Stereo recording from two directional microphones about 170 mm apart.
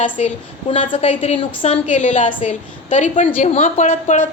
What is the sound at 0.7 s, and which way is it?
A woman's voice, 30° left (ahead or behind).